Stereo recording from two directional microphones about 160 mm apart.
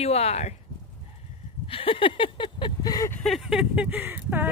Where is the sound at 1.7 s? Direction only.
35° left (ahead or behind).